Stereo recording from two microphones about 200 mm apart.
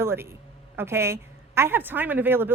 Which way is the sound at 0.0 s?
10° right (ahead or behind).